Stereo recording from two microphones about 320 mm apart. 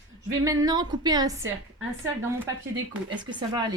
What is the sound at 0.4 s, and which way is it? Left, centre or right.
Speech, centre.